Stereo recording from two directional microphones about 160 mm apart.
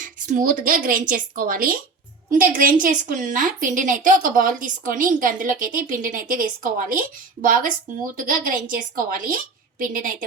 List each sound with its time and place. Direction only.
0.0 s a woman's voice: 55° right (ahead or behind)